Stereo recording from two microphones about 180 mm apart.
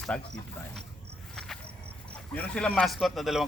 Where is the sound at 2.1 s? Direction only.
10° left (ahead or behind).